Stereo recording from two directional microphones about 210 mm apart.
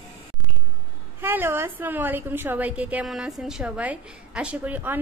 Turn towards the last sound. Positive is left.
turn(degrees=-10)  # may be behind; listen again after turning